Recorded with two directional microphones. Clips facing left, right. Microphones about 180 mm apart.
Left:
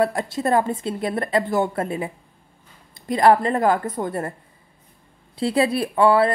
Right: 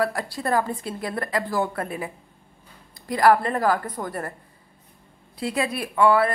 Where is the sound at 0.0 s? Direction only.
20° left (ahead or behind).